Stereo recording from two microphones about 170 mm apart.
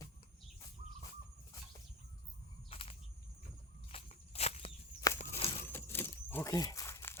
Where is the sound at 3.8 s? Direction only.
35° left (ahead or behind).